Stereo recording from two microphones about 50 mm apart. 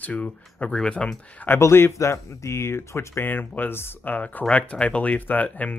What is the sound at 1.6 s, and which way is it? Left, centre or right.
Speech, left.